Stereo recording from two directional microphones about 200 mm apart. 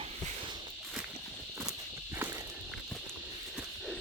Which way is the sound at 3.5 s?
5° right (ahead or behind).